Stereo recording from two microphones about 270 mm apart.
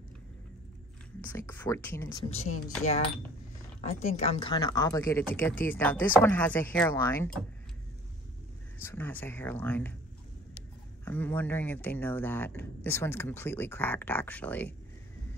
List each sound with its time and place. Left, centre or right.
1.2 s speech: centre
2.8 s speech: left; by 7.4 s centre
8.7 s speech: centre
11.1 s speech: centre